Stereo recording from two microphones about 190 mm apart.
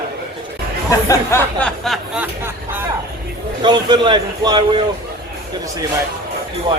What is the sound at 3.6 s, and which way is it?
A man's voice, 25° right (ahead or behind).